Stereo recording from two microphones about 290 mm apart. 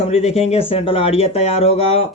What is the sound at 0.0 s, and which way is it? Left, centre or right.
Speech, left.